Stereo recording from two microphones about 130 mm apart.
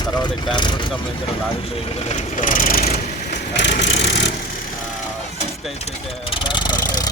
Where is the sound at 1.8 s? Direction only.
60° left (ahead or behind); by 2.8 s 90° left.